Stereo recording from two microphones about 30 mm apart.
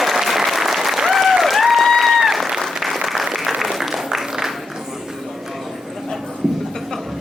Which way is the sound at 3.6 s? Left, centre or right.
Centre.